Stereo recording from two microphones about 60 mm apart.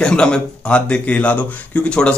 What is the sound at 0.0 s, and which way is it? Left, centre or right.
Speech, centre.